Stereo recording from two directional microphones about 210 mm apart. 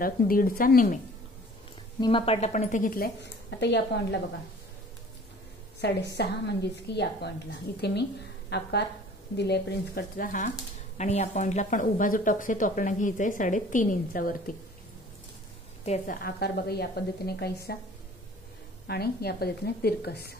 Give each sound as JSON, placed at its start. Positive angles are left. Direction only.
{"t": 0.0, "sound": "a woman's voice", "side_deg": 45}
{"t": 2.0, "sound": "a woman's voice", "side_deg": 25}
{"t": 5.8, "sound": "a woman's voice", "side_deg": 55}
{"t": 15.8, "sound": "a woman's voice", "side_deg": 30}
{"t": 16.2, "sound": "a woman's voice", "side_deg": 50}
{"t": 18.9, "sound": "a woman's voice", "side_deg": 50}